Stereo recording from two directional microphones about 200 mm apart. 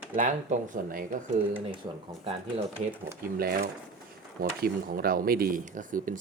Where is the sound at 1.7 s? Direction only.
25° right (ahead or behind).